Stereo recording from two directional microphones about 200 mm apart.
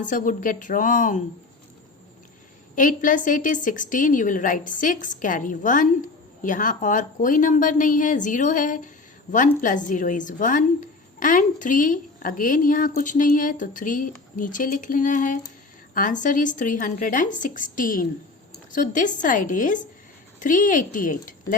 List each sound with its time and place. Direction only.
0.0 s a woman's voice: 40° left (ahead or behind)
2.7 s a woman's voice: 40° left (ahead or behind)